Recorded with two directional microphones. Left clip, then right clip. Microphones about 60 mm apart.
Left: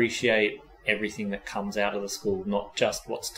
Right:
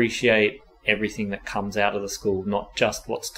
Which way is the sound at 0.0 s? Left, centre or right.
Right.